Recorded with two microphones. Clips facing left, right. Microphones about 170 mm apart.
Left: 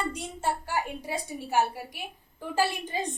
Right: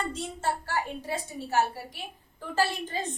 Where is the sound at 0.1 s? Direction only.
15° left (ahead or behind).